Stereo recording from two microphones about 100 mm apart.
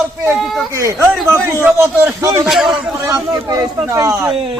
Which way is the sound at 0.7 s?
30° right (ahead or behind).